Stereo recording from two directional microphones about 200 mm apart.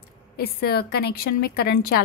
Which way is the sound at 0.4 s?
50° left (ahead or behind).